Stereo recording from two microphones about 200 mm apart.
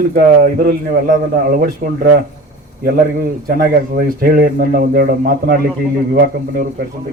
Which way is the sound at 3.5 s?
50° right (ahead or behind).